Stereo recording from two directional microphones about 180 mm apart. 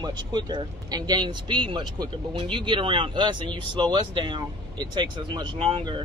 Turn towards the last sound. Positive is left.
turn(degrees=-30)  # may be behind; listen again after turning